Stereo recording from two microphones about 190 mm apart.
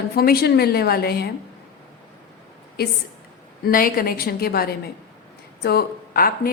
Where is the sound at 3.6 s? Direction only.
50° left (ahead or behind).